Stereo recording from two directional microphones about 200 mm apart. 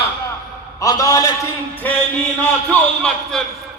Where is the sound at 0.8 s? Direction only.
15° left (ahead or behind).